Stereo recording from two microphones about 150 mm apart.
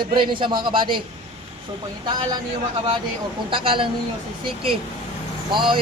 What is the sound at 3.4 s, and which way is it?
Speech, 35° right (ahead or behind).